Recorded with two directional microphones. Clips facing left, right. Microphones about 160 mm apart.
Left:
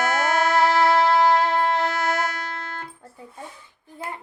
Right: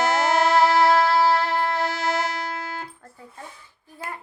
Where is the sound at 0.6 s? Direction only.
10° right (ahead or behind).